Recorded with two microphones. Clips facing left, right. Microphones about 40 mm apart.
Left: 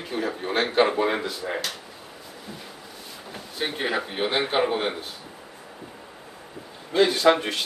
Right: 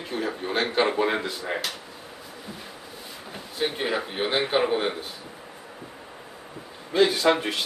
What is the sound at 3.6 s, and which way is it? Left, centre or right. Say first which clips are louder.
Speech: even; centre.